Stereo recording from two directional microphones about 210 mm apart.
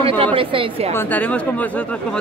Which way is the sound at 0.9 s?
5° left (ahead or behind).